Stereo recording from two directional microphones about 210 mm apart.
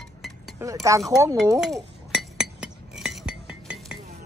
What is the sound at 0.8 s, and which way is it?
Speech, 15° right (ahead or behind).